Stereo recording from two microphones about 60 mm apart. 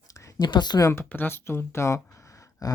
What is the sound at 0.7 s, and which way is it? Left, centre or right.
Speech, left.